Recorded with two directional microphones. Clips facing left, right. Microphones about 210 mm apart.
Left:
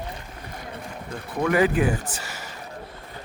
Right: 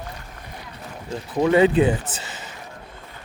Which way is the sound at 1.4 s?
25° right (ahead or behind).